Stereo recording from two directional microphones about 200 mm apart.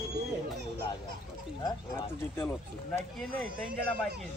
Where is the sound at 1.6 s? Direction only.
15° left (ahead or behind).